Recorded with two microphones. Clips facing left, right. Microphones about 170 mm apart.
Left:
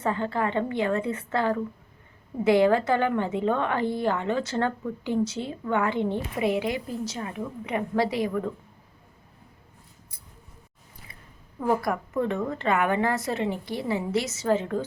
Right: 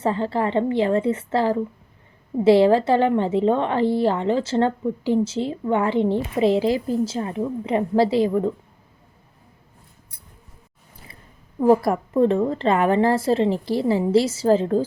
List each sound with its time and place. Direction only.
0.0 s a woman's voice: 30° right (ahead or behind)
11.6 s a woman's voice: 30° right (ahead or behind)